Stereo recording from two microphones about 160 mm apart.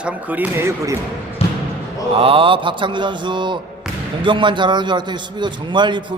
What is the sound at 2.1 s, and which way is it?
A man's voice, 35° right (ahead or behind).